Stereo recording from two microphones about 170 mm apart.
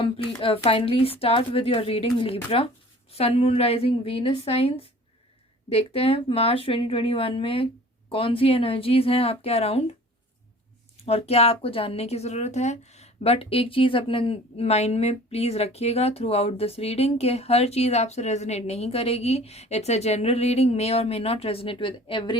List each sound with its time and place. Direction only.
0.0 s a woman's voice: 35° left (ahead or behind)
11.0 s a woman's voice: 35° left (ahead or behind)